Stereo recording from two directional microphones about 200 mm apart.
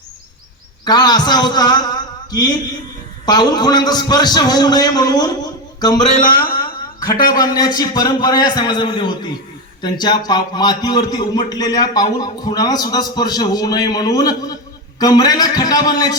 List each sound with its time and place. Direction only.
0.9 s a man's voice: 20° left (ahead or behind)
6.1 s speech: 40° left (ahead or behind)
7.3 s speech: 20° left (ahead or behind)